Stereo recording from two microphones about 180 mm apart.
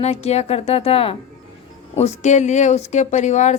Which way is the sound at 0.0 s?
35° left (ahead or behind).